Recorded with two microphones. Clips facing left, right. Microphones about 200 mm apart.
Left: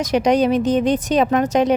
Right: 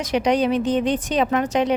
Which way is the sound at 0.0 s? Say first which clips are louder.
Left 3 dB; 45° left (ahead or behind).